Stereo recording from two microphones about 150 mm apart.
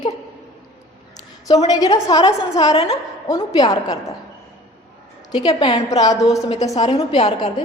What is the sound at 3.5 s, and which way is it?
Speech, 25° left (ahead or behind).